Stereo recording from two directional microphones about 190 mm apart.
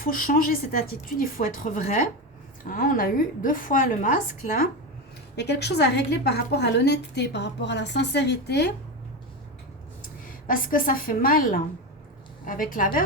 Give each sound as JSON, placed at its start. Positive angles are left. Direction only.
{"t": 0.0, "sound": "a woman's voice", "side_deg": 45}
{"t": 5.4, "sound": "a woman's voice", "side_deg": 60}
{"t": 10.2, "sound": "a woman's voice", "side_deg": 45}